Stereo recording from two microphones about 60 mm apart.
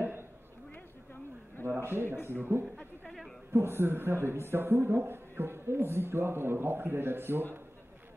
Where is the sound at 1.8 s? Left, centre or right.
Right.